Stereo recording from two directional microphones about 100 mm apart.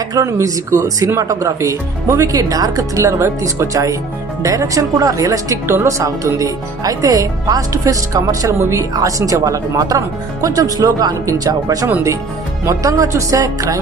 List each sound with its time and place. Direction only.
0.1 s a woman's voice: 30° right (ahead or behind)